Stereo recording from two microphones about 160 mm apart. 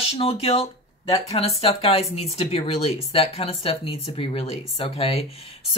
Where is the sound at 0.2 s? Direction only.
40° left (ahead or behind).